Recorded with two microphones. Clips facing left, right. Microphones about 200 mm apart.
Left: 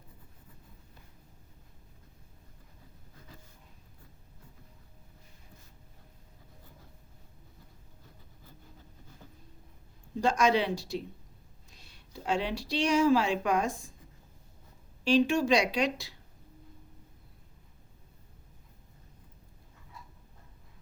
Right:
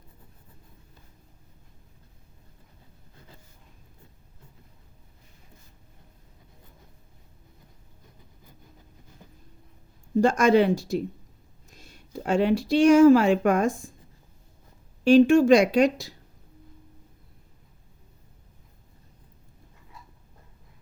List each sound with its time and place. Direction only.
10.2 s speech: 50° right (ahead or behind)
15.0 s speech: 50° right (ahead or behind)